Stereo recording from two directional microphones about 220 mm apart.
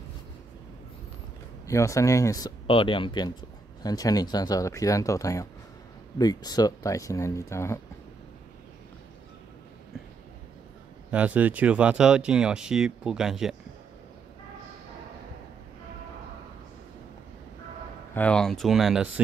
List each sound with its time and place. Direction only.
1.7 s speech: 15° left (ahead or behind)
11.1 s speech: 5° right (ahead or behind)
18.1 s speech: 5° left (ahead or behind)